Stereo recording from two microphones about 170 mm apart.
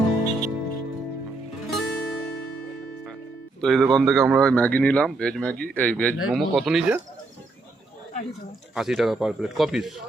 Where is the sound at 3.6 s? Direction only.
Centre (ahead or behind).